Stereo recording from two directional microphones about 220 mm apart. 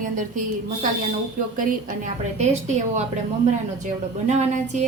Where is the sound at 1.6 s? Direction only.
35° right (ahead or behind).